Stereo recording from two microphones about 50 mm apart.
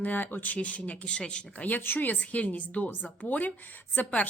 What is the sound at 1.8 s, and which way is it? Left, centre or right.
A woman's voice, left.